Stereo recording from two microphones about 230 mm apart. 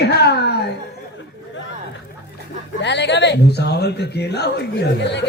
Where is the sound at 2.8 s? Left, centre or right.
Left.